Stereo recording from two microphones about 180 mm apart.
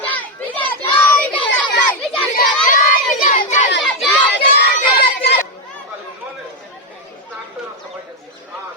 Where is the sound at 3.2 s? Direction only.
45° left (ahead or behind).